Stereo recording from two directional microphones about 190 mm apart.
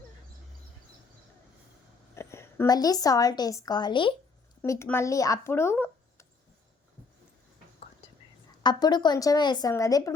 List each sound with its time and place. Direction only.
2.1 s a woman's voice: 15° left (ahead or behind)
8.6 s a woman's voice: 25° left (ahead or behind)